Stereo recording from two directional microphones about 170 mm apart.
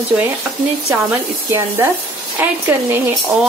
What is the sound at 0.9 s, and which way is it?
A woman's voice, 15° right (ahead or behind).